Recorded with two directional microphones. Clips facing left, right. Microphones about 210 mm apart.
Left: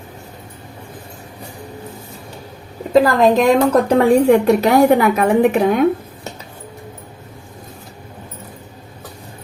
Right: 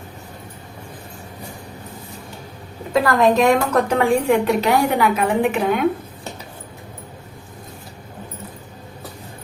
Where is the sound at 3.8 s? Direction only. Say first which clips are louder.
Left 6 dB; 40° left (ahead or behind).